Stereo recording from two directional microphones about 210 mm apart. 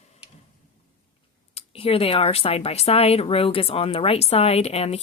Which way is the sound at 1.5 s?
30° left (ahead or behind).